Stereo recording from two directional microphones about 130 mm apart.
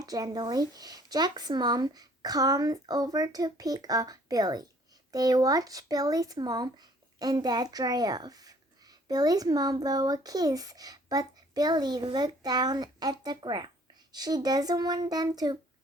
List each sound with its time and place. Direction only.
0.0 s speech: 30° right (ahead or behind)